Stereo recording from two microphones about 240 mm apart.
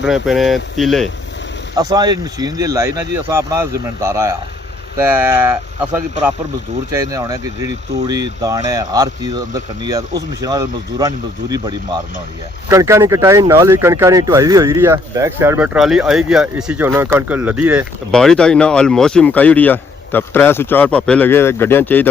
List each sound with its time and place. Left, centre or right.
0.0 s speech: centre
1.7 s speech: centre